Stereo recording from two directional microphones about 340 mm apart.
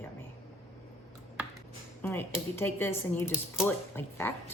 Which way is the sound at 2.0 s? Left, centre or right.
Centre.